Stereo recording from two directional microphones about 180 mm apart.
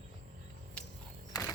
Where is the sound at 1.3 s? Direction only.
15° left (ahead or behind).